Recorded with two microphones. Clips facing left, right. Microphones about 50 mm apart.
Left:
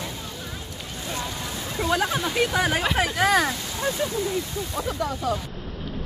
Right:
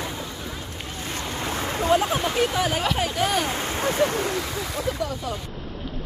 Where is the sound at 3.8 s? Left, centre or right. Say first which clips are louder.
Right 2 dB; right.